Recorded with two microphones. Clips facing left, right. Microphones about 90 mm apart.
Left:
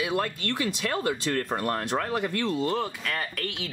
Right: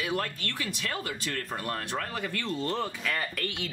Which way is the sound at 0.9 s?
35° left (ahead or behind).